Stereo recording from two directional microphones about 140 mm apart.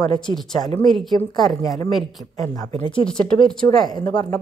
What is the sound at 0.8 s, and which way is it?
Speech, centre (ahead or behind).